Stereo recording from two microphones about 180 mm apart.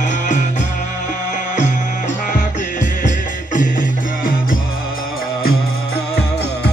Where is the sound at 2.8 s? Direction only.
45° left (ahead or behind).